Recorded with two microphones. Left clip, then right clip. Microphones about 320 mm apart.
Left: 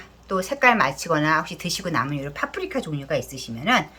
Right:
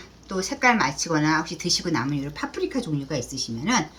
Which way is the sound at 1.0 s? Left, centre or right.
Centre.